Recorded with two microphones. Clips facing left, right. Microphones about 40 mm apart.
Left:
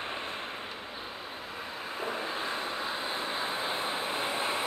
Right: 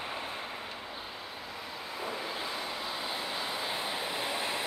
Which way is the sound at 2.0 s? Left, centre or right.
Left.